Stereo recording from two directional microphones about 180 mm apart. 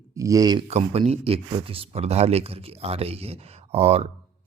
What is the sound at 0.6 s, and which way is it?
Speech, 35° right (ahead or behind).